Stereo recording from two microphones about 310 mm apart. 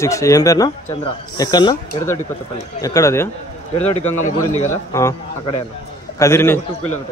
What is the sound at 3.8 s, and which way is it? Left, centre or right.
Speech, left.